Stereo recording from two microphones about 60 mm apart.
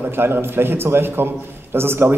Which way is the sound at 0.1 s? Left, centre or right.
Right.